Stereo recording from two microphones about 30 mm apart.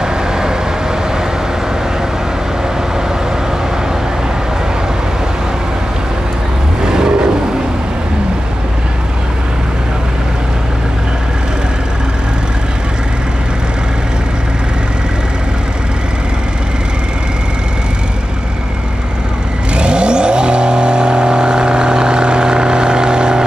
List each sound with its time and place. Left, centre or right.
6.8 s vehicle: right
19.7 s vehicle: right